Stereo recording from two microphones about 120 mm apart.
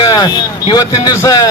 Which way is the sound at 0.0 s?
35° left (ahead or behind).